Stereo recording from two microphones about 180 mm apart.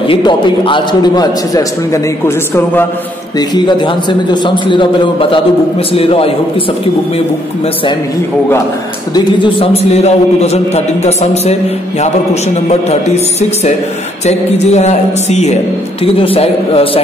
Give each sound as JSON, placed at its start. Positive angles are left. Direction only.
{"t": 0.0, "sound": "a man's voice", "side_deg": 30}
{"t": 3.3, "sound": "a man's voice", "side_deg": 25}
{"t": 9.1, "sound": "a man's voice", "side_deg": 25}
{"t": 12.5, "sound": "a man's voice", "side_deg": 35}